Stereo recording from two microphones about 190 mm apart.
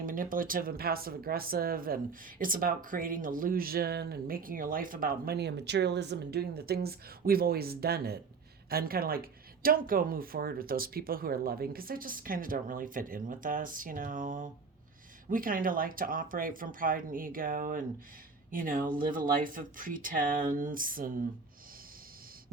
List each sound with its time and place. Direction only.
0.0 s speech: 45° right (ahead or behind)